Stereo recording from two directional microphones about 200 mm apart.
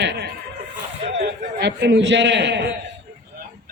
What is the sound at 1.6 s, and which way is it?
A man's voice, 60° right (ahead or behind).